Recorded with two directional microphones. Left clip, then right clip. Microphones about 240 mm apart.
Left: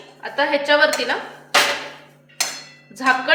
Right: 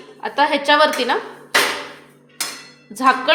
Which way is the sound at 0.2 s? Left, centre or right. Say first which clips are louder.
Right 2 dB; right.